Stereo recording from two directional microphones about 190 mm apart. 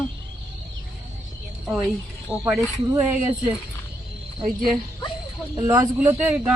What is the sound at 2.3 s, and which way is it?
Speech, 15° right (ahead or behind).